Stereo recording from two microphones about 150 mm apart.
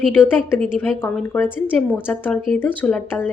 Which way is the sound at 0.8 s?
10° left (ahead or behind).